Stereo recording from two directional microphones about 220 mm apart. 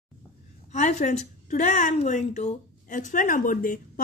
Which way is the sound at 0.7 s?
30° left (ahead or behind).